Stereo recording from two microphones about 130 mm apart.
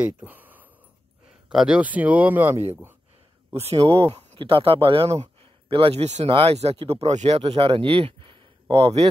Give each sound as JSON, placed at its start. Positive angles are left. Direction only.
{"t": 0.0, "sound": "speech", "side_deg": -15}
{"t": 3.5, "sound": "a man's voice", "side_deg": -50}
{"t": 6.2, "sound": "speech", "side_deg": -45}